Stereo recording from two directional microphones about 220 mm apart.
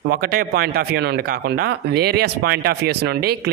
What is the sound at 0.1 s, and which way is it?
Speech, 40° right (ahead or behind).